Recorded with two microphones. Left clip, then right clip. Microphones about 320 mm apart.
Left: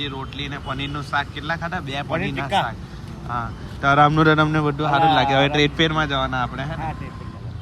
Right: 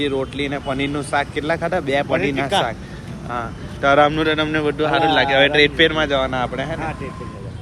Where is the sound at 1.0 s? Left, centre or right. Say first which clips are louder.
Right 3 dB; centre.